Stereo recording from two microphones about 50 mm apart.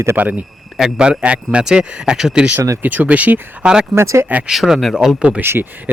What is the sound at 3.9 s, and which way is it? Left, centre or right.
Speech, right.